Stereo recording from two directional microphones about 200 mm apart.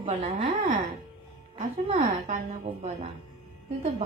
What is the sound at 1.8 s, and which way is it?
A woman's voice, 35° right (ahead or behind).